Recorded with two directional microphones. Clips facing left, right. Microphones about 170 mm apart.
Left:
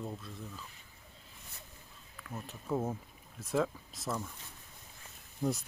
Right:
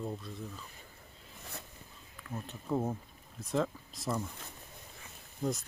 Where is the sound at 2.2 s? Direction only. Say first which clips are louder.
Right 2 dB; 5° left (ahead or behind).